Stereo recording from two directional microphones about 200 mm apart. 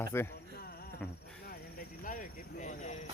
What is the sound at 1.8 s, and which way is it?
Cricket, 40° left (ahead or behind).